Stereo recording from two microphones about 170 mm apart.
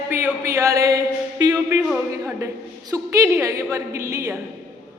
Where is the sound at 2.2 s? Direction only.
20° right (ahead or behind).